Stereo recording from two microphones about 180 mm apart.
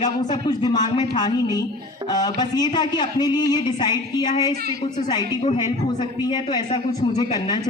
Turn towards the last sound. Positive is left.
turn(degrees=25)  # may be behind; listen again after turning